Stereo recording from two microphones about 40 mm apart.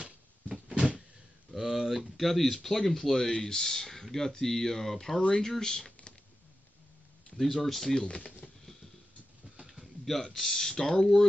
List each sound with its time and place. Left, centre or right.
0.7 s cupboard open or close: right
1.5 s speech: centre
7.3 s speech: centre
10.0 s speech: centre